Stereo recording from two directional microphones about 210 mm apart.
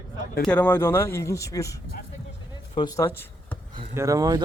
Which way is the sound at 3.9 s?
15° right (ahead or behind).